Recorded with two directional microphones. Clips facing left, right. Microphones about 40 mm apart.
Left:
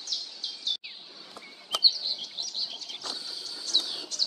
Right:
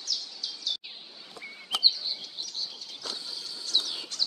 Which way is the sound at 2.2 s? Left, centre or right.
Left.